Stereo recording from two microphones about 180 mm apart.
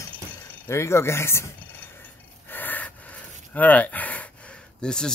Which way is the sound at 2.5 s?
10° left (ahead or behind).